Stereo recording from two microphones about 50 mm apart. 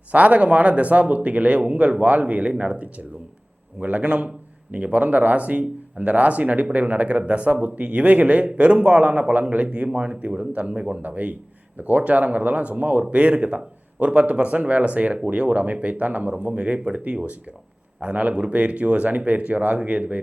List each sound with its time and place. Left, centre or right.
0.1 s speech: right